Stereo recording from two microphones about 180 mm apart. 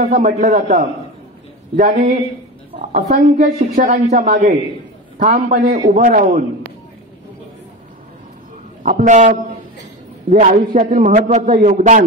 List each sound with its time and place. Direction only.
0.0 s a woman's voice: 45° right (ahead or behind)
8.8 s a woman's voice: 45° right (ahead or behind)
10.4 s a woman's voice: 50° right (ahead or behind)